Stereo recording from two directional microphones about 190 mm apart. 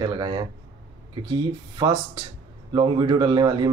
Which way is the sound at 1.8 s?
20° right (ahead or behind).